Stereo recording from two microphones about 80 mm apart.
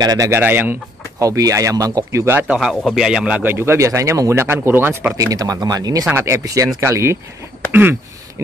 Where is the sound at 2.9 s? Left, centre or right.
Centre.